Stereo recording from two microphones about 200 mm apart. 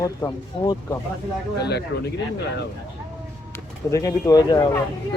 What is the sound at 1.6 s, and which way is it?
Speech, 55° left (ahead or behind).